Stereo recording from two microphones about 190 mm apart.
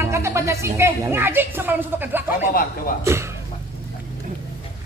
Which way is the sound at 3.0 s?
15° right (ahead or behind).